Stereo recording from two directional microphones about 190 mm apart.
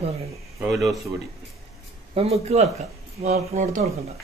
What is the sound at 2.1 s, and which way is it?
Speech, 30° right (ahead or behind).